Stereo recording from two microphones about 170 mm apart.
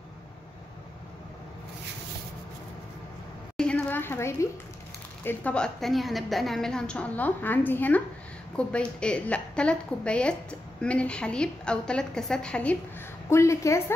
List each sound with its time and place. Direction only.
3.5 s a sound: 5° left (ahead or behind)
5.2 s a woman's voice: 10° left (ahead or behind)
13.3 s a woman's voice: 15° left (ahead or behind)